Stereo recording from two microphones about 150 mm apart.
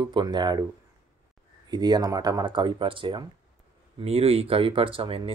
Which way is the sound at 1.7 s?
30° right (ahead or behind).